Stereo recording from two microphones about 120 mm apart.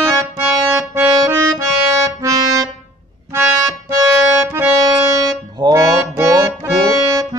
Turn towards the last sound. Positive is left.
turn(degrees=-25)  # may be behind; listen again after turning